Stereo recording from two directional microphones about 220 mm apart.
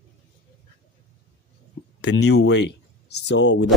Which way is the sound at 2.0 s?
50° left (ahead or behind).